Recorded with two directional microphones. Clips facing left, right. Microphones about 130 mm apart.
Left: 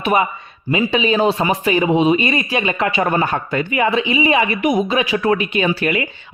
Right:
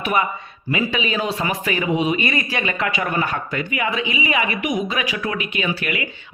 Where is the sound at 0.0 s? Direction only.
25° left (ahead or behind).